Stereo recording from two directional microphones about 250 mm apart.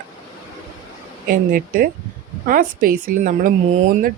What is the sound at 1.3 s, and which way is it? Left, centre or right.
Speech, right.